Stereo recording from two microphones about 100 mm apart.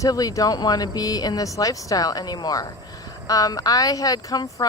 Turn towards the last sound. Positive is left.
turn(degrees=40)  # may be behind; listen again after turning